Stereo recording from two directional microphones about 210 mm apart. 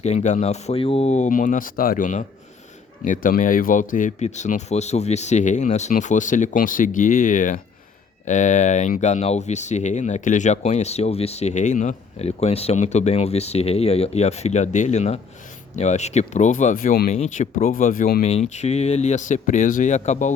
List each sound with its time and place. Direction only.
0.0 s speech: 30° left (ahead or behind)